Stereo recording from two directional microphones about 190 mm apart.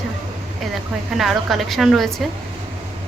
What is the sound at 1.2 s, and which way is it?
Speech, centre (ahead or behind).